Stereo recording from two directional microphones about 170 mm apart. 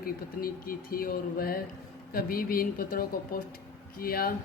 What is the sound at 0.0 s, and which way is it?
A woman's voice, 60° left (ahead or behind).